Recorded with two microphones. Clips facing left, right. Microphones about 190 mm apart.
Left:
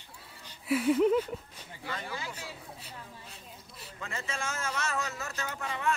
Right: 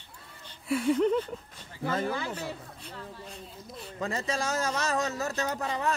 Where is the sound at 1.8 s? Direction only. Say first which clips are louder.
Right 9 dB; 45° right (ahead or behind).